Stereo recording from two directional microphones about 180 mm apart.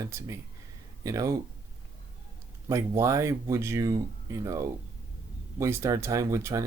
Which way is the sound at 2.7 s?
15° right (ahead or behind).